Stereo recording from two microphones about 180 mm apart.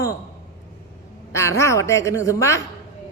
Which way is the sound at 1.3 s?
15° left (ahead or behind).